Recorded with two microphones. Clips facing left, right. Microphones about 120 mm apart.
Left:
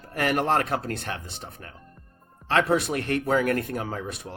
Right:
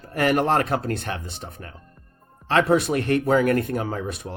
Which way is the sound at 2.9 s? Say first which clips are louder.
Right 4 dB; 25° right (ahead or behind).